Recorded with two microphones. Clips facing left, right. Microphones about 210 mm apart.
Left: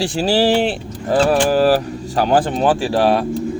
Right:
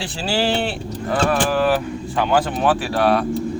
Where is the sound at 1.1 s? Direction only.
35° left (ahead or behind).